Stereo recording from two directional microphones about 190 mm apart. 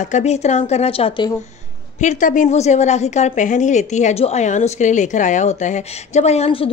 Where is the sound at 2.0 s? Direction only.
40° left (ahead or behind).